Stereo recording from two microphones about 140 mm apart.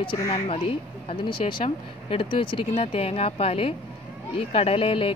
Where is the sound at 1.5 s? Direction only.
40° left (ahead or behind).